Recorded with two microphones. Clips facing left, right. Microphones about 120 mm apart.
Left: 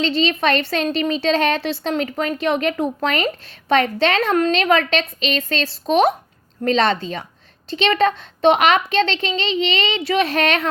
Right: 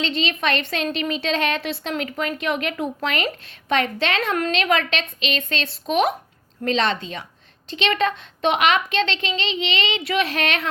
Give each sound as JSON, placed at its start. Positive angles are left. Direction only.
{"t": 0.0, "sound": "a woman's voice", "side_deg": 35}